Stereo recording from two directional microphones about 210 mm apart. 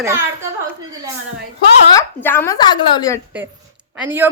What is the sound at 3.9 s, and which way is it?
Speech, 10° right (ahead or behind).